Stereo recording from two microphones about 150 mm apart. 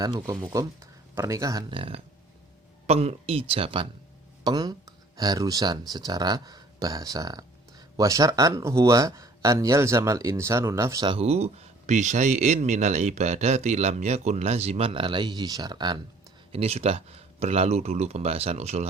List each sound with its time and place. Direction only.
0.0 s speech: 25° right (ahead or behind)
1.7 s speech: 40° right (ahead or behind)
4.4 s speech: 25° right (ahead or behind)
11.0 s a man's voice: 40° right (ahead or behind)
16.5 s a man's voice: 40° right (ahead or behind)